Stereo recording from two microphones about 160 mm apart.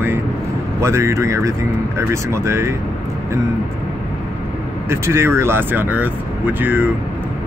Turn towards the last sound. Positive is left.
turn(degrees=-10)  # may be behind; listen again after turning